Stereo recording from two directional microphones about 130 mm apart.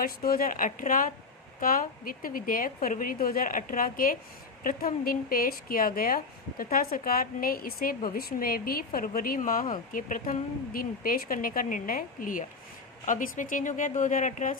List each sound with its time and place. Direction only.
0.0 s a woman's voice: 90° left; by 14.5 s 70° left (ahead or behind)